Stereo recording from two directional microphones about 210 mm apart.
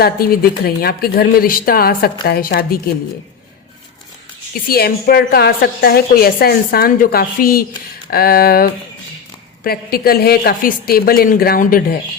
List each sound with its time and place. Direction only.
0.0 s a woman's voice: 45° left (ahead or behind)
4.7 s a woman's voice: 45° left (ahead or behind)